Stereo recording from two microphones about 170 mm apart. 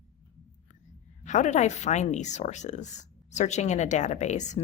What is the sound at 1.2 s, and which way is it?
A woman's voice, 45° left (ahead or behind).